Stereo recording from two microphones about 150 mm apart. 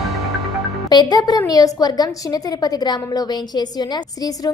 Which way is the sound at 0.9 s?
25° left (ahead or behind).